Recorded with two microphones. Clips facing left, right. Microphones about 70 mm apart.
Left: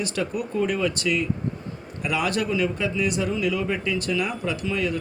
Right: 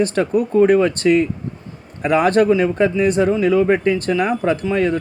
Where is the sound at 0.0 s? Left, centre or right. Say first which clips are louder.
Right 10 dB; right.